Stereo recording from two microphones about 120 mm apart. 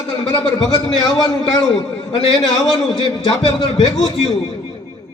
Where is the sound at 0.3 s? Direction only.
35° left (ahead or behind).